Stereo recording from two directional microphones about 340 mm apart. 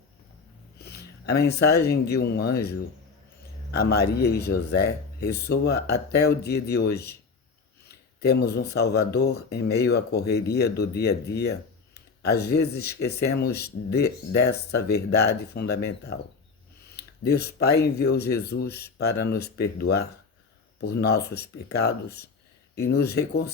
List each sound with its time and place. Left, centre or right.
0.8 s speech: left